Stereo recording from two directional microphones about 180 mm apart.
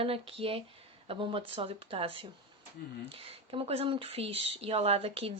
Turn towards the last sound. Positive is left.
turn(degrees=-30)  # may be behind; listen again after turning